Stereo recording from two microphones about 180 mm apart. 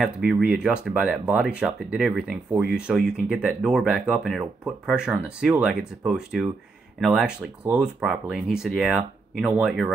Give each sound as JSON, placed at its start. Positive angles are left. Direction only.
{"t": 0.0, "sound": "speech", "side_deg": -5}